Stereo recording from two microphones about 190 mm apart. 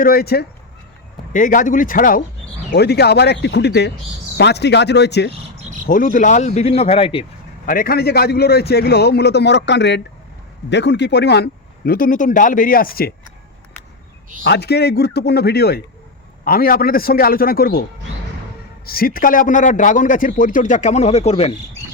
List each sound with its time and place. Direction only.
0.0 s a man's voice: 50° left (ahead or behind)
1.3 s a man's voice: 45° left (ahead or behind)
2.7 s a man's voice: 60° left (ahead or behind)
5.8 s speech: 45° left (ahead or behind); by 7.3 s 30° left (ahead or behind)
7.7 s a man's voice: 50° left (ahead or behind)
11.9 s a man's voice: 45° left (ahead or behind)
14.4 s a man's voice: 60° left (ahead or behind)
18.9 s a man's voice: 50° left (ahead or behind); by 21.5 s 35° left (ahead or behind)